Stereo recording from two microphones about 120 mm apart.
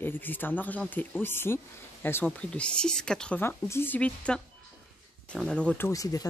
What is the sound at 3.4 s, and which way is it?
Speech, 20° left (ahead or behind).